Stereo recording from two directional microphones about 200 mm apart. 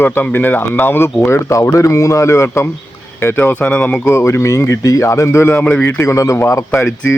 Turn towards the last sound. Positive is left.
turn(degrees=15)  # may be behind; listen again after turning